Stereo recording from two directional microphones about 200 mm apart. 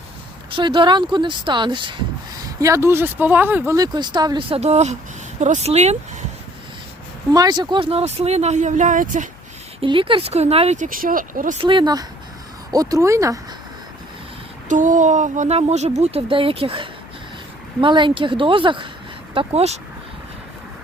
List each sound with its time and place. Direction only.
0.5 s a woman's voice: 25° right (ahead or behind)
7.3 s speech: 20° right (ahead or behind); by 9.3 s 40° right (ahead or behind)
9.8 s speech: 25° right (ahead or behind); by 11.5 s 45° right (ahead or behind)
11.6 s a woman's voice: 25° right (ahead or behind)
14.7 s a woman's voice: 40° right (ahead or behind)